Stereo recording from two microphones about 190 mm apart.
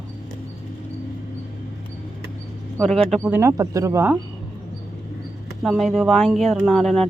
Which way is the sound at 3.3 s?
15° right (ahead or behind).